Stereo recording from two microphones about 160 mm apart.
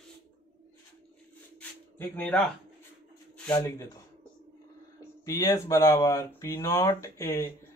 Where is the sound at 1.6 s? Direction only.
10° left (ahead or behind).